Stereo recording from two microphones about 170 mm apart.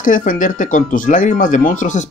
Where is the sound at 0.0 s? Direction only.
50° left (ahead or behind).